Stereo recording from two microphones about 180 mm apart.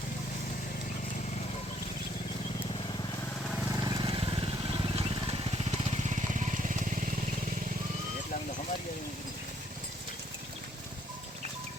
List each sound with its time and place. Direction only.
3.7 s vehicle: 20° right (ahead or behind); by 7.1 s 45° right (ahead or behind)